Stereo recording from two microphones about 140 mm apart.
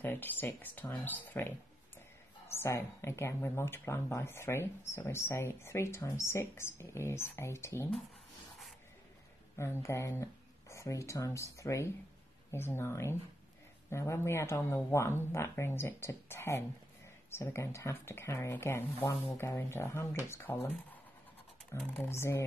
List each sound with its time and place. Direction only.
0.0 s a woman's voice: 15° left (ahead or behind)
9.6 s a woman's voice: 20° left (ahead or behind)